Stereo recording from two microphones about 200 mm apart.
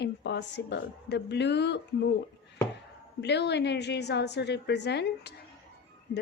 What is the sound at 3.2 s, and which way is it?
Speech, 60° left (ahead or behind).